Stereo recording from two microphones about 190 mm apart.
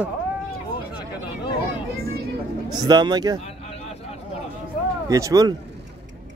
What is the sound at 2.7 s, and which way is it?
Speech, 20° right (ahead or behind).